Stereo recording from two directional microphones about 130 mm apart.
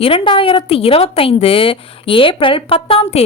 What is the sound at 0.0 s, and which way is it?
A woman's voice, 45° left (ahead or behind).